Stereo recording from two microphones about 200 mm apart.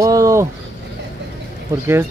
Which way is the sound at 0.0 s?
15° right (ahead or behind).